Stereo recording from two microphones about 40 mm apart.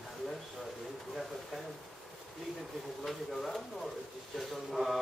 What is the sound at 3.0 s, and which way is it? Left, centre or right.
Speech, centre.